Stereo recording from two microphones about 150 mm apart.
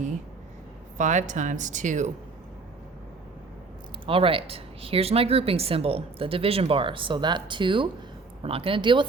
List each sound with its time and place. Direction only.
0.9 s speech: 55° right (ahead or behind)
4.0 s a woman's voice: 35° right (ahead or behind)